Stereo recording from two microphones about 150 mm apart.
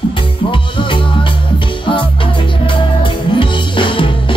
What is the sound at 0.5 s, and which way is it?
Music, 35° left (ahead or behind).